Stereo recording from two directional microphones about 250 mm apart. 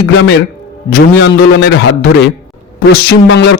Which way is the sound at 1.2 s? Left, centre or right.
Left.